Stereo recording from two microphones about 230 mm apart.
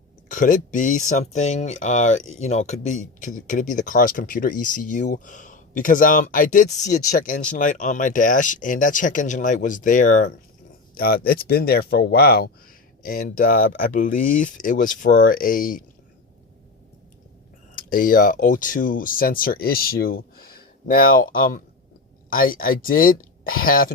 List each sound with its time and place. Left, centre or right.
0.3 s speech: left
17.7 s speech: left